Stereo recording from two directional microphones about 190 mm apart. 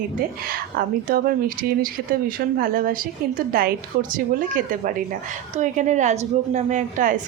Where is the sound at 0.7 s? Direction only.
50° right (ahead or behind).